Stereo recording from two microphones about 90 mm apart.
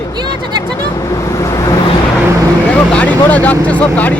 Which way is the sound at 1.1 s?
40° left (ahead or behind).